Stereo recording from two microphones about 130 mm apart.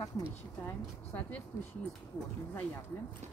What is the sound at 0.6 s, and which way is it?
Speech, 15° left (ahead or behind).